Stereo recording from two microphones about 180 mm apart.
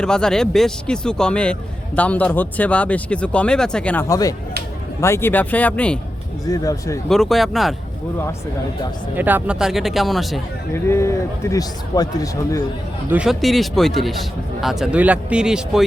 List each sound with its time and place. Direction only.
0.0 s a man's voice: 5° left (ahead or behind)
4.1 s speech: 20° left (ahead or behind)
6.4 s speech: 20° left (ahead or behind)
7.1 s a man's voice: centre (ahead or behind)
9.1 s a man's voice: 10° right (ahead or behind)
10.8 s speech: 15° left (ahead or behind)
13.1 s a man's voice: 5° right (ahead or behind)